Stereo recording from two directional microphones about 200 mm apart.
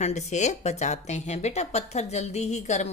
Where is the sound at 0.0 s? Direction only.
35° left (ahead or behind).